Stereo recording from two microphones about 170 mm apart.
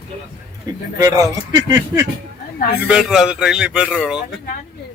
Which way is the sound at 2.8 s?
5° right (ahead or behind).